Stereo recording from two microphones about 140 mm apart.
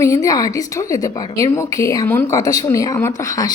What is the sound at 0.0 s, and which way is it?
A woman's voice, 25° left (ahead or behind).